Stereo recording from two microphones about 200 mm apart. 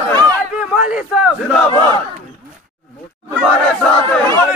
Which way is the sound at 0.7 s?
5° right (ahead or behind).